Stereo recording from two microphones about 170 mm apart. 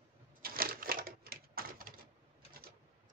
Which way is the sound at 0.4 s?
60° right (ahead or behind).